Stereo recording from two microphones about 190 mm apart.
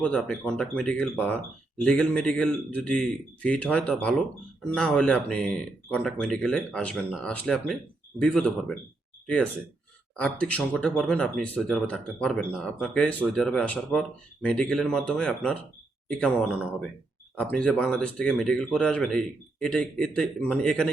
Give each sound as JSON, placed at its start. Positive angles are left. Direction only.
{"t": 0.0, "sound": "speech", "side_deg": 5}